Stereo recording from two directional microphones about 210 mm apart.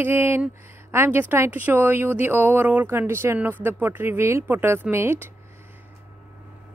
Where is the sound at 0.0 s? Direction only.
10° right (ahead or behind).